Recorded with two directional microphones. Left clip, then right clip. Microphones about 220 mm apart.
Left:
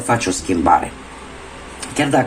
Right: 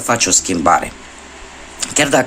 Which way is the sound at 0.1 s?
40° right (ahead or behind).